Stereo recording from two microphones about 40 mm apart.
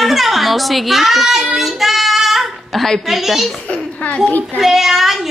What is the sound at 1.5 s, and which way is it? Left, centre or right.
Child singing, centre.